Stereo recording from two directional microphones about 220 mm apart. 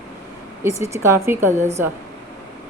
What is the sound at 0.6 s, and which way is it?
A woman's voice, 10° right (ahead or behind).